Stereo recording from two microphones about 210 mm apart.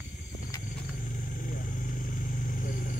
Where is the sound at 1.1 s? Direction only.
40° left (ahead or behind).